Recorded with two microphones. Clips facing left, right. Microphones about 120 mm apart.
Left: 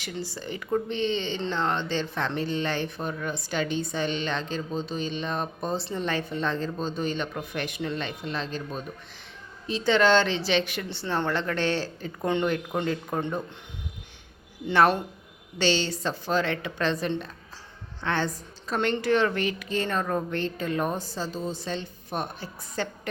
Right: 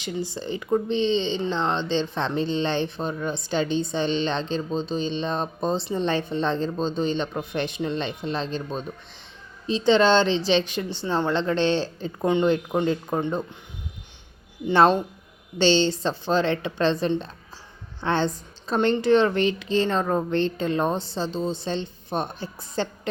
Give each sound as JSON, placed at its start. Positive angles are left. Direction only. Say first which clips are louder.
{"t": 0.0, "sound": "speech", "louder": "right 5 dB", "side_deg": -20}
{"t": 14.7, "sound": "speech", "louder": "right 3 dB", "side_deg": -20}